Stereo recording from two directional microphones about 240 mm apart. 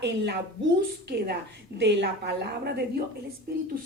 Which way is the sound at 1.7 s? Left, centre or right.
Right.